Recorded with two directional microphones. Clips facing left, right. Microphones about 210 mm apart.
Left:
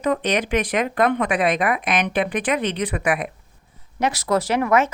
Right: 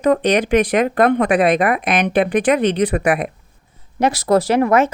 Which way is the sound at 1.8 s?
35° right (ahead or behind).